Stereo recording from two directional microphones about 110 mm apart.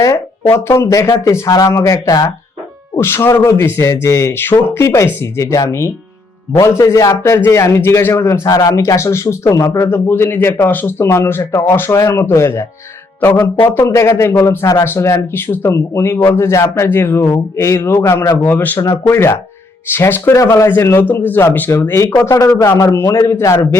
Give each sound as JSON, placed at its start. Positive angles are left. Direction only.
{"t": 0.5, "sound": "a man's voice", "side_deg": 25}
{"t": 13.7, "sound": "a man's voice", "side_deg": 20}